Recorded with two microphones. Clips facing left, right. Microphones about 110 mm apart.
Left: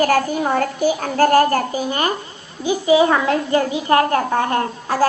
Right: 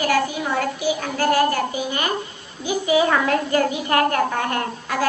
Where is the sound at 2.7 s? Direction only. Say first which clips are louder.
Left 4 dB; 25° left (ahead or behind).